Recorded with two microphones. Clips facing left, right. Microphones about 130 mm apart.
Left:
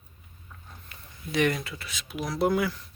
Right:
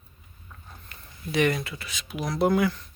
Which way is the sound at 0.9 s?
Centre (ahead or behind).